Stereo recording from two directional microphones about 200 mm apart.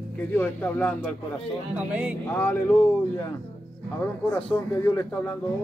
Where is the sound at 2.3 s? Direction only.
10° left (ahead or behind).